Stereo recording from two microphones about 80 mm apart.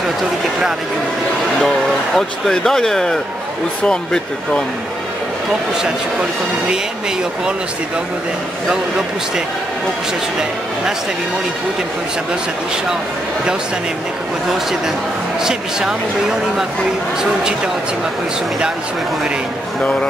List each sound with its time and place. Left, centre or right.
2.1 s speech: centre
15.4 s a man's voice: centre
19.8 s speech: centre